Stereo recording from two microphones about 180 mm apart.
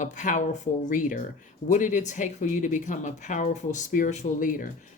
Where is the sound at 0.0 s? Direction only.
45° left (ahead or behind).